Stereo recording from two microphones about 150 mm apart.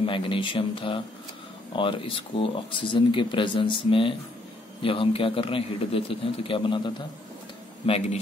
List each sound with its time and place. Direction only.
0.0 s speech: 35° left (ahead or behind)